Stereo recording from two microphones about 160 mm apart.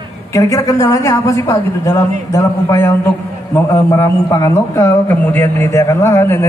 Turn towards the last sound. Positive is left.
turn(degrees=15)  # may be behind; listen again after turning